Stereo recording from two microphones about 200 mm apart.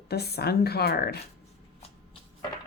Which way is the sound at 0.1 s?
55° left (ahead or behind).